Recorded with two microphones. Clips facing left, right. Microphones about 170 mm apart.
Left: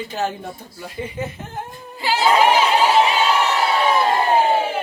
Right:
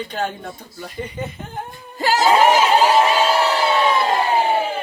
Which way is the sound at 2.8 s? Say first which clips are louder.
Right 1 dB; 40° right (ahead or behind).